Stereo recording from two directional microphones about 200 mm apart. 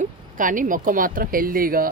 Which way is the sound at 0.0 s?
40° right (ahead or behind).